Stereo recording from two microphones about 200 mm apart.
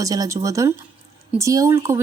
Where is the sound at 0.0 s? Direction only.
15° right (ahead or behind).